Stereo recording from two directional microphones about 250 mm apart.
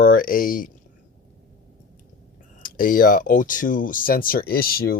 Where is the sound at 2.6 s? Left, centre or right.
Left.